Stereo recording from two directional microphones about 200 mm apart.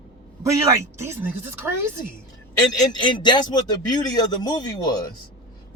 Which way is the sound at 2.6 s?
20° left (ahead or behind).